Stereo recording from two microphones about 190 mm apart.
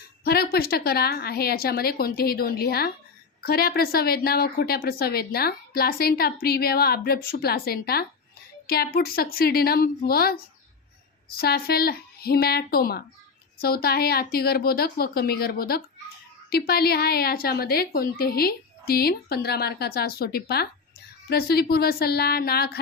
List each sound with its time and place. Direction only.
0.3 s a woman's voice: 55° left (ahead or behind)